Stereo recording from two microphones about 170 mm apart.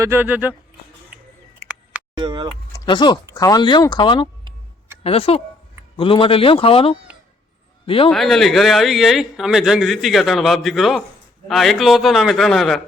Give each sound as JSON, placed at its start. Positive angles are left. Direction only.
{"t": 0.0, "sound": "speech", "side_deg": -15}
{"t": 2.1, "sound": "speech", "side_deg": -25}
{"t": 2.7, "sound": "a man's voice", "side_deg": 25}
{"t": 8.1, "sound": "a man's voice", "side_deg": 0}